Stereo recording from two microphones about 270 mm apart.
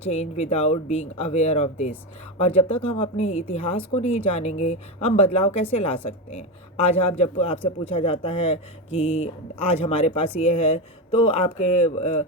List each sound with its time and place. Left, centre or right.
0.1 s a woman's voice: left